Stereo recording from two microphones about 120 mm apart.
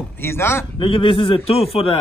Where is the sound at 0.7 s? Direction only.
45° left (ahead or behind).